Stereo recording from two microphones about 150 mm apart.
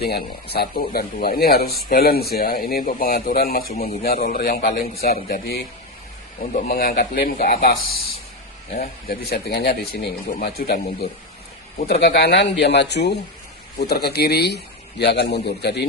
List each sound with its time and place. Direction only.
0.0 s a man's voice: 90° left
6.4 s speech: 70° left (ahead or behind); by 10.8 s 90° left
11.9 s speech: 90° left